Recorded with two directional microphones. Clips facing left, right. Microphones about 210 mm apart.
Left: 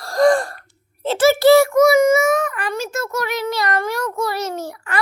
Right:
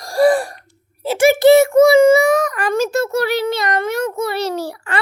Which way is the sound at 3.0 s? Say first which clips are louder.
Right 5 dB; 30° right (ahead or behind).